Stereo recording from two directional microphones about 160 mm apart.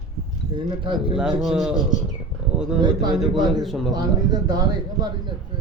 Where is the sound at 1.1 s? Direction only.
Centre (ahead or behind).